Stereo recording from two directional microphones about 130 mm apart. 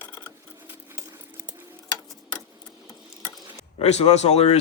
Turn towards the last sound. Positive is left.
turn(degrees=55)  # may be behind; listen again after turning